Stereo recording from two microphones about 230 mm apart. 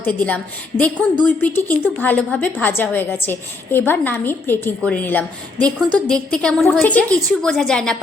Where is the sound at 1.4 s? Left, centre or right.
Centre.